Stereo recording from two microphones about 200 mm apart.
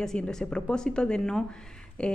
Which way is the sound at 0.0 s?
5° left (ahead or behind).